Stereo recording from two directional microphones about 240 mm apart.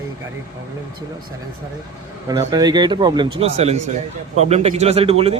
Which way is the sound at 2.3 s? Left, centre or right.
Centre.